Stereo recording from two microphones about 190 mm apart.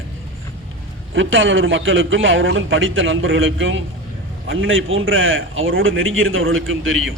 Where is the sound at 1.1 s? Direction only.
85° right.